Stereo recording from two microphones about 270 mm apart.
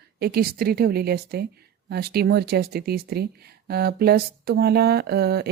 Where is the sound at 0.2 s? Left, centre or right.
Right.